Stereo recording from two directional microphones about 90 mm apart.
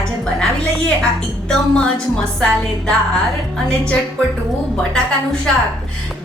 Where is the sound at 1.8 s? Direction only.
10° left (ahead or behind).